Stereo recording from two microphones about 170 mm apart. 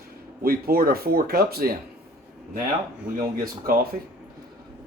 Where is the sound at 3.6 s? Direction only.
60° right (ahead or behind).